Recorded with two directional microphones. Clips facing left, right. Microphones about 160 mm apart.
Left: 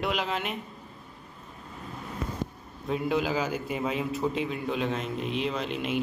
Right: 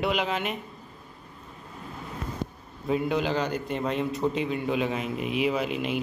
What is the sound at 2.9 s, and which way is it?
A man's voice, centre (ahead or behind).